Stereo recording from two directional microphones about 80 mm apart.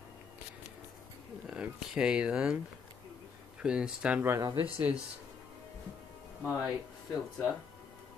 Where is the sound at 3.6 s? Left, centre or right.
Centre.